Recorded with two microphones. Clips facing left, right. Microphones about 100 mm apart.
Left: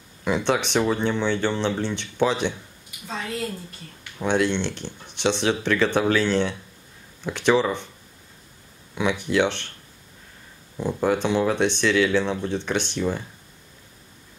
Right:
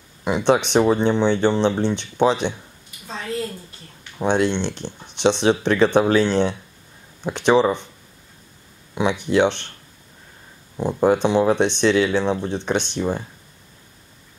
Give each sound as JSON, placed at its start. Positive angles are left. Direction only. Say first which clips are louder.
{"t": 0.2, "sound": "speech", "louder": "right 4 dB", "side_deg": -20}
{"t": 4.2, "sound": "speech", "louder": "right 3 dB", "side_deg": -20}
{"t": 8.9, "sound": "speech", "louder": "right 3 dB", "side_deg": -20}
{"t": 10.8, "sound": "speech", "louder": "right 5 dB", "side_deg": -25}